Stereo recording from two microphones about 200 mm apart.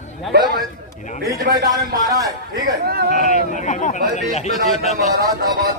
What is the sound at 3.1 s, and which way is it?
Speech, 40° left (ahead or behind).